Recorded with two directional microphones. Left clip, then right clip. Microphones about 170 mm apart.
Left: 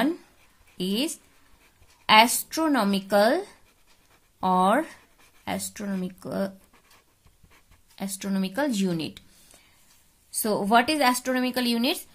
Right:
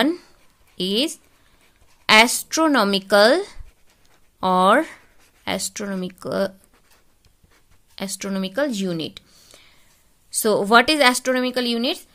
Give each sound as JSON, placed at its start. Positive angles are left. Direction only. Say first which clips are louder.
{"t": 0.7, "sound": "speech", "louder": "right 7 dB", "side_deg": -45}
{"t": 7.9, "sound": "speech", "louder": "right 5 dB", "side_deg": -45}
{"t": 10.3, "sound": "speech", "louder": "right 6 dB", "side_deg": -50}